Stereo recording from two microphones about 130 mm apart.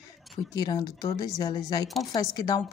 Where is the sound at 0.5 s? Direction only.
30° left (ahead or behind).